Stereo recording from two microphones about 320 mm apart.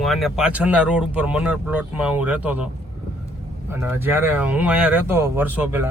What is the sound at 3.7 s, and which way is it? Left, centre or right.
Speech, centre.